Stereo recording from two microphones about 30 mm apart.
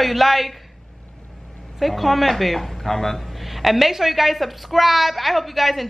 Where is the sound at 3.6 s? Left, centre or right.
Centre.